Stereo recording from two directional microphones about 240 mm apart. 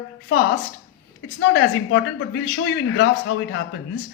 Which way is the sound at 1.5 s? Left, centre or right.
Left.